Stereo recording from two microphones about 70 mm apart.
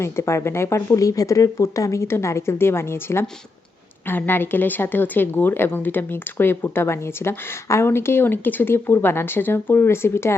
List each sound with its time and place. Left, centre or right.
0.0 s a woman's voice: left